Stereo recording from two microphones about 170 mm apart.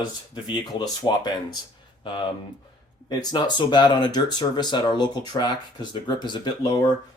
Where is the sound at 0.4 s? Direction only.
30° left (ahead or behind).